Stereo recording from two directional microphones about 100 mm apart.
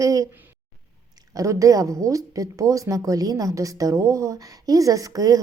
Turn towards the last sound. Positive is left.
turn(degrees=-35)  # may be behind; listen again after turning